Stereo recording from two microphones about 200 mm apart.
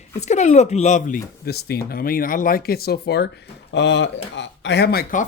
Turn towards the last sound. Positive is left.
turn(degrees=45)  # may be behind; listen again after turning